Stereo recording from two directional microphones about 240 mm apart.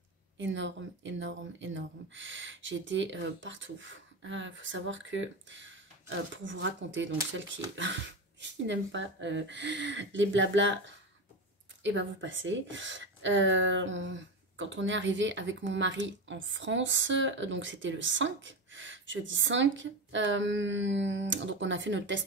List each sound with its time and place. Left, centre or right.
0.4 s speech: right